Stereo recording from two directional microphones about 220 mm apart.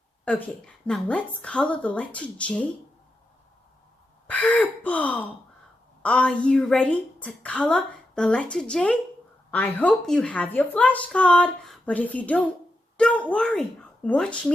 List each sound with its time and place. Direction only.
0.3 s a woman's voice: 5° left (ahead or behind)
4.3 s a woman's voice: 5° left (ahead or behind)